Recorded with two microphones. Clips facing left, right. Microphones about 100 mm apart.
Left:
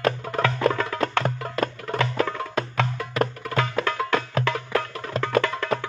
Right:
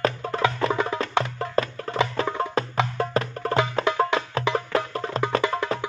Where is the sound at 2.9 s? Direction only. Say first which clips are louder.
Right 1 dB; 35° right (ahead or behind).